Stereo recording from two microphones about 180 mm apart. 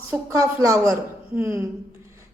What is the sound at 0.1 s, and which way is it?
A woman's voice, 20° right (ahead or behind).